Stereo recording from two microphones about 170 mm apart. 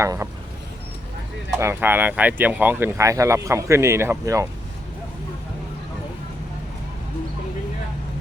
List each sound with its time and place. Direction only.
0.0 s speech: 15° right (ahead or behind)
1.5 s speech: 15° right (ahead or behind)